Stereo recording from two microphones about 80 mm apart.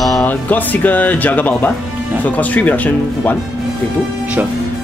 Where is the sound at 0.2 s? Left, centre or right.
Left.